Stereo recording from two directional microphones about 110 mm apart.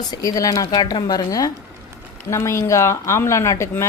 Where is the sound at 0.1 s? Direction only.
30° left (ahead or behind).